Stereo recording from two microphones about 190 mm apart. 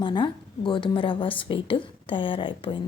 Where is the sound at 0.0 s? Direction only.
25° left (ahead or behind).